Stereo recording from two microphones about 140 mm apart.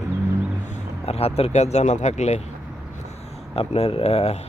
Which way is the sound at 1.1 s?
45° left (ahead or behind).